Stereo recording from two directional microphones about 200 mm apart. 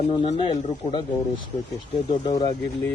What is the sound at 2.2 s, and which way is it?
Speech, 20° left (ahead or behind).